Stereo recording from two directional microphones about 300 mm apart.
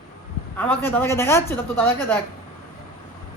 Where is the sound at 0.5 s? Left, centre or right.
Centre.